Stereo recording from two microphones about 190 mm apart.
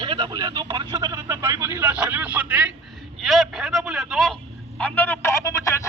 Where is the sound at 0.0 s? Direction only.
25° right (ahead or behind); by 4.4 s centre (ahead or behind).